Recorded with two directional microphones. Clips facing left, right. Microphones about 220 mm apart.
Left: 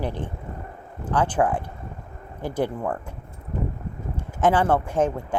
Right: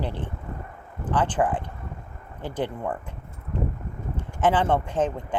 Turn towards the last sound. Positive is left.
turn(degrees=10)  # may be behind; listen again after turning